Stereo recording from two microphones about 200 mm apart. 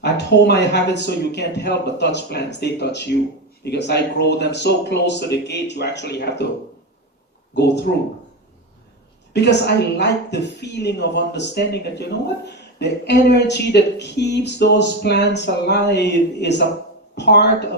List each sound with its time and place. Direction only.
0.0 s speech: 60° left (ahead or behind)
7.5 s speech: 55° left (ahead or behind)
9.3 s speech: 60° left (ahead or behind)